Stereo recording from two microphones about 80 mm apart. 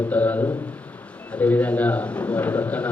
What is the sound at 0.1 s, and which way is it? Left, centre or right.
A man's voice, centre.